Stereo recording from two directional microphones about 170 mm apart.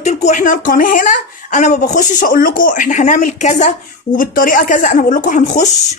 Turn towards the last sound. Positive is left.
turn(degrees=45)  # may be behind; listen again after turning